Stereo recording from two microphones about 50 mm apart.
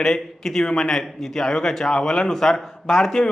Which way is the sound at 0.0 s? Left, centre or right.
Centre.